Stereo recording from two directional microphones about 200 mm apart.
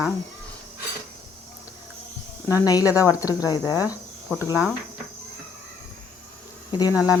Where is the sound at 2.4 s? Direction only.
15° left (ahead or behind).